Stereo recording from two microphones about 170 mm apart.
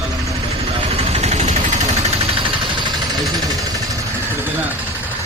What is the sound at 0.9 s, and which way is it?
Vehicle, 40° right (ahead or behind).